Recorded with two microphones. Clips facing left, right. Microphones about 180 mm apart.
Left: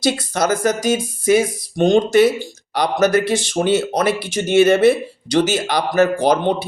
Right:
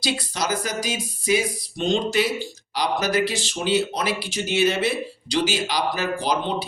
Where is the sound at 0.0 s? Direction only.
50° left (ahead or behind).